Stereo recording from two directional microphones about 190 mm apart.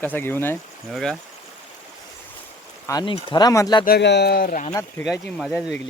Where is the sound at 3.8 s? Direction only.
60° left (ahead or behind); by 4.7 s 45° left (ahead or behind).